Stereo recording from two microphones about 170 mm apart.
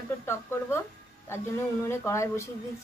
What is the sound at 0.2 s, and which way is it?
Speech, 15° left (ahead or behind).